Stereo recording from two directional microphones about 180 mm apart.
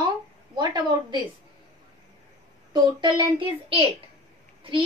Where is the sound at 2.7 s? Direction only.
25° right (ahead or behind).